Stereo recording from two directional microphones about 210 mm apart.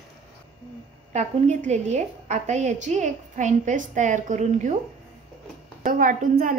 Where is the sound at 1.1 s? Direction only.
30° right (ahead or behind).